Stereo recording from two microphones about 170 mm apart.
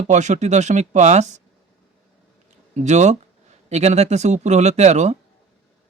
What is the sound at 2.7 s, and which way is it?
Speech, 45° right (ahead or behind).